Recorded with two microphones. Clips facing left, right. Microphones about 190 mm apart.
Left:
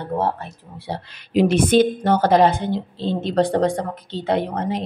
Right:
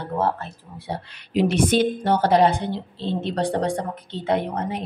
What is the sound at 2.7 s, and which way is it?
A woman's voice, 40° left (ahead or behind).